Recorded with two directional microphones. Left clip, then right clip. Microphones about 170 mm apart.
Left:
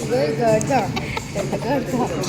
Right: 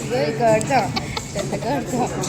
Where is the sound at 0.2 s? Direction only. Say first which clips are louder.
Right 2 dB; 30° left (ahead or behind).